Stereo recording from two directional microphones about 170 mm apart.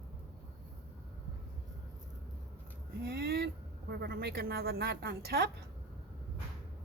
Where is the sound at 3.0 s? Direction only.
70° right (ahead or behind).